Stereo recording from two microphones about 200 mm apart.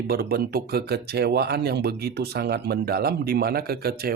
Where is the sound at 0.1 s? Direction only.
50° right (ahead or behind).